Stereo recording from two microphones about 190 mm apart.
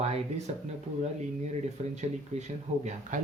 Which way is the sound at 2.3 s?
35° right (ahead or behind).